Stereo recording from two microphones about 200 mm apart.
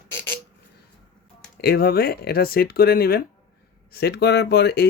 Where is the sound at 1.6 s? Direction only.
50° left (ahead or behind).